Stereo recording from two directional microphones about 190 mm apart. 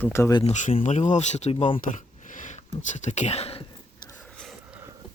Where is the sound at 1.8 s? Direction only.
40° left (ahead or behind).